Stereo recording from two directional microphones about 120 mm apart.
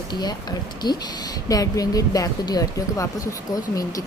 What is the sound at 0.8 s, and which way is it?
Speech, 35° left (ahead or behind).